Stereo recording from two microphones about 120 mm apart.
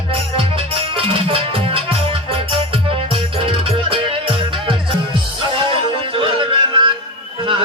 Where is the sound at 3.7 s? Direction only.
45° right (ahead or behind).